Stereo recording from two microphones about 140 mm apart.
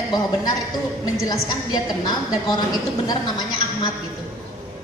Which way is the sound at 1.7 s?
30° left (ahead or behind).